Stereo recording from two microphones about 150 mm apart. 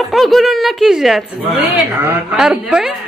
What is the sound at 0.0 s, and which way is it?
A woman's voice, centre (ahead or behind).